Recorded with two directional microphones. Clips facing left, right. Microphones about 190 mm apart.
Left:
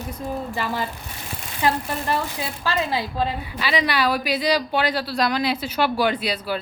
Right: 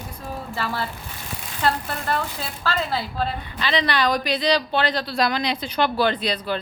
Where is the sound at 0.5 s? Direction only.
15° left (ahead or behind).